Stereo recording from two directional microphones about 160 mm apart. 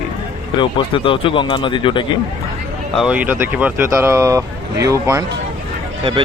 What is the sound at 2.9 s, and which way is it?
Speech, 5° right (ahead or behind).